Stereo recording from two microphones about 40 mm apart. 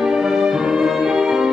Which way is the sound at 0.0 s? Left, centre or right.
Centre.